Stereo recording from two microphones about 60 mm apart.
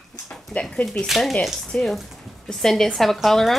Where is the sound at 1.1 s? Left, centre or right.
Centre.